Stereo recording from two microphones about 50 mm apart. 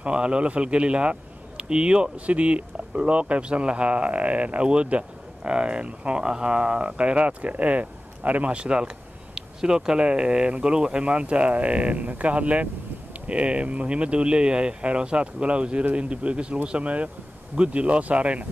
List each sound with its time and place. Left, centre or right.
0.0 s speech: right